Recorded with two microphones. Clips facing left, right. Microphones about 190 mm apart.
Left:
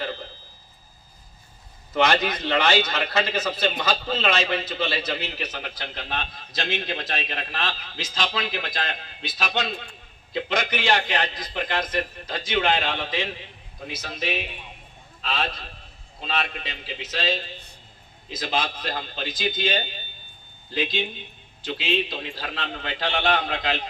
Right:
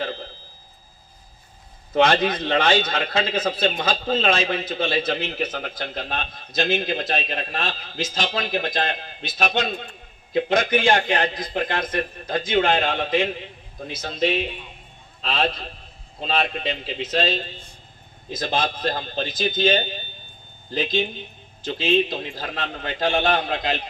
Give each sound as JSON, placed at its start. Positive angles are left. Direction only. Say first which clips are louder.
{"t": 2.4, "sound": "a man's voice", "louder": "right 2 dB", "side_deg": -50}
{"t": 13.9, "sound": "a man's voice", "louder": "right 7 dB", "side_deg": -25}
{"t": 18.3, "sound": "a man's voice", "louder": "right 3 dB", "side_deg": -50}